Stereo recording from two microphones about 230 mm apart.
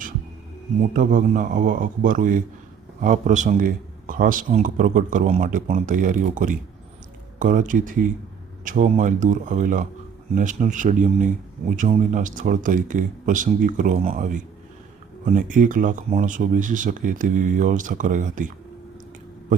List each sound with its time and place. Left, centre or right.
0.8 s speech: right